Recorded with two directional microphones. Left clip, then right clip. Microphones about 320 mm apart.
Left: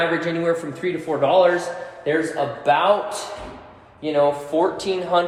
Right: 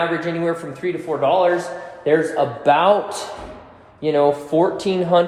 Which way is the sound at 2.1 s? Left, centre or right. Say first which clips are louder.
Right 4 dB; centre.